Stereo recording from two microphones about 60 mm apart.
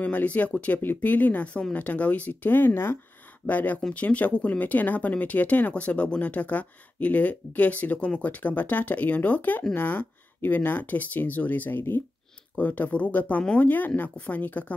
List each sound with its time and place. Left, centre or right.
0.0 s speech: left
3.4 s speech: left